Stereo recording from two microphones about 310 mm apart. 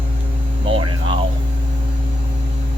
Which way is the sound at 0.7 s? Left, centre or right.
Centre.